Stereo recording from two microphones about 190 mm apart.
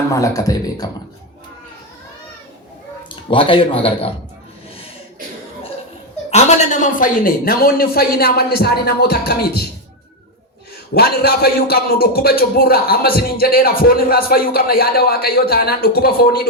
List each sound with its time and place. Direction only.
0.1 s speech: 15° left (ahead or behind)
3.2 s speech: 25° left (ahead or behind)
6.3 s speech: 35° left (ahead or behind); by 9.6 s 55° left (ahead or behind)
10.9 s a man's voice: 55° left (ahead or behind)